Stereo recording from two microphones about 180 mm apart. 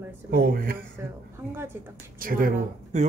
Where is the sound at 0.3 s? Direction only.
55° right (ahead or behind).